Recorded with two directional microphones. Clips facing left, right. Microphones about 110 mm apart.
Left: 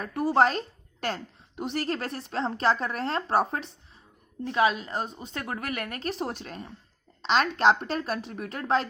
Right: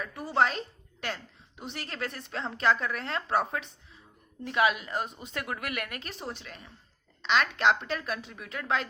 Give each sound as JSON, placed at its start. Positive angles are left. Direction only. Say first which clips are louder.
{"t": 0.0, "sound": "a woman's voice", "louder": "left 5 dB", "side_deg": 50}
{"t": 1.0, "sound": "a sound", "louder": "left 5 dB", "side_deg": 40}
{"t": 1.7, "sound": "speech", "louder": "left 6 dB", "side_deg": 40}
{"t": 6.1, "sound": "a woman's voice", "louder": "left 7 dB", "side_deg": 55}
{"t": 7.2, "sound": "speech", "louder": "left 3 dB", "side_deg": 35}